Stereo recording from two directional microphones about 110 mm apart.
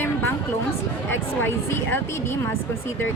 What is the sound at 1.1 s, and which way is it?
Speech, 20° left (ahead or behind).